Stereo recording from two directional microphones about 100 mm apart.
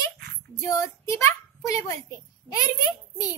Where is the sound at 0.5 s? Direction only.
35° left (ahead or behind).